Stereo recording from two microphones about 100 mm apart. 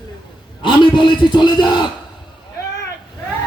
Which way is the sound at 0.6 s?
55° left (ahead or behind).